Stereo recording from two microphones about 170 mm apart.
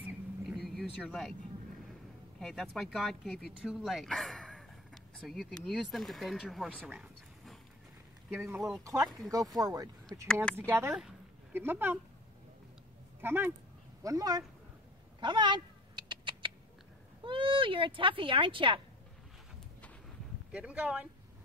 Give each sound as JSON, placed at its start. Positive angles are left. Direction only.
{"t": 0.6, "sound": "vehicle", "side_deg": 0}
{"t": 2.4, "sound": "speech", "side_deg": 0}
{"t": 8.5, "sound": "speech", "side_deg": 0}
{"t": 8.8, "sound": "speech", "side_deg": -20}
{"t": 10.2, "sound": "speech", "side_deg": 5}
{"t": 10.7, "sound": "speech", "side_deg": -15}
{"t": 13.2, "sound": "speech", "side_deg": -15}
{"t": 15.1, "sound": "cat", "side_deg": -25}
{"t": 17.2, "sound": "speech", "side_deg": -30}
{"t": 20.5, "sound": "speech", "side_deg": -5}